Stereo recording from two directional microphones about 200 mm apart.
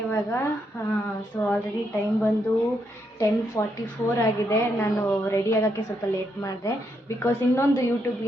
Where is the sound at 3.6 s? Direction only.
15° left (ahead or behind).